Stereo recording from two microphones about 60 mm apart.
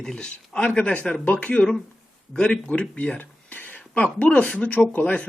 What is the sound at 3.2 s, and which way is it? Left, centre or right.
Speech, left.